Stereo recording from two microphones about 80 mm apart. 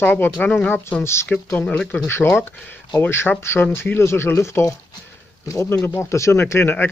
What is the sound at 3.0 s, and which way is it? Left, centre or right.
Speech, left.